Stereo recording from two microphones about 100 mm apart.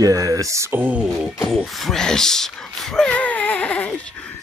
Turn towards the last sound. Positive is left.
turn(degrees=10)  # may be behind; listen again after turning